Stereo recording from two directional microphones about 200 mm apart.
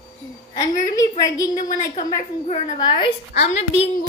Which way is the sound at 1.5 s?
40° left (ahead or behind).